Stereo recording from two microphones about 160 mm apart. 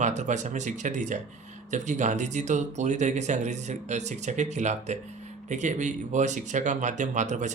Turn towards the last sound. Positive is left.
turn(degrees=-50)  # may be behind; listen again after turning